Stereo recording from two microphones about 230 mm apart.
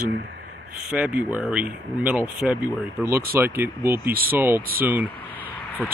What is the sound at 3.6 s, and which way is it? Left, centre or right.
Speech, centre.